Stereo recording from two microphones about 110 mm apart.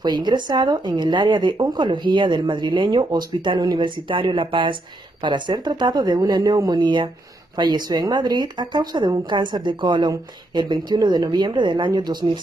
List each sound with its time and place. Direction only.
0.0 s a woman's voice: 40° right (ahead or behind)